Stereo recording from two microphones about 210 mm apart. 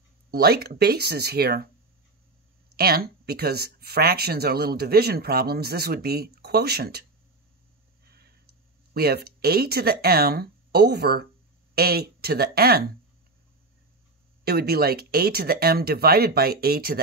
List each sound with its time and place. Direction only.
0.3 s speech: 50° right (ahead or behind)
2.7 s speech: 45° right (ahead or behind)
8.9 s speech: 50° right (ahead or behind)
14.4 s speech: 50° right (ahead or behind)